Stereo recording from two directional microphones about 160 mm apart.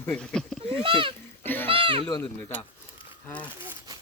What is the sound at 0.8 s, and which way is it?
Speech, 35° right (ahead or behind).